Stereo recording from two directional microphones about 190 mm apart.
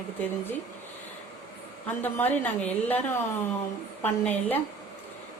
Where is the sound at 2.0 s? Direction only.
10° left (ahead or behind).